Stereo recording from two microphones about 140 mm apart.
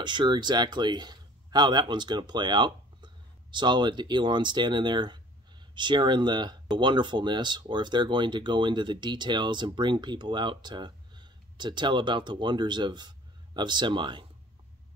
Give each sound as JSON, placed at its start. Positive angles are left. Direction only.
{"t": 0.0, "sound": "speech", "side_deg": -35}